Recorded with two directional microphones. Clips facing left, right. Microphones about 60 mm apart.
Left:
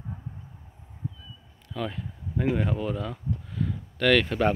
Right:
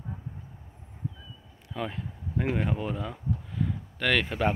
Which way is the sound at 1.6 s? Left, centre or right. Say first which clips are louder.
Left 1 dB; centre.